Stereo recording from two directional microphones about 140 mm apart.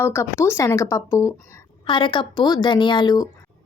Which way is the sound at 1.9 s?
35° left (ahead or behind).